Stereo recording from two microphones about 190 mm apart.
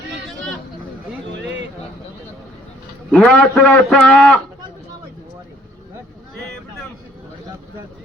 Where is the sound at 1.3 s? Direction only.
70° right (ahead or behind).